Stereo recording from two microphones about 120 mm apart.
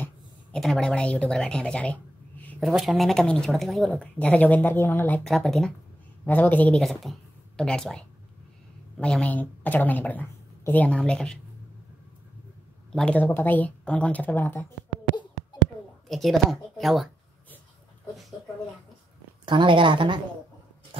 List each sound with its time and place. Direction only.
0.0 s a sound: 5° left (ahead or behind)
2.6 s a woman's voice: centre (ahead or behind); by 5.2 s 15° left (ahead or behind)
5.2 s speech: centre (ahead or behind)
6.2 s a woman's voice: 15° left (ahead or behind)
6.8 s a woman's voice: centre (ahead or behind)
12.9 s a woman's voice: 10° left (ahead or behind)
16.1 s speech: centre (ahead or behind)
19.4 s speech: 45° right (ahead or behind)
20.9 s a sound: 50° right (ahead or behind)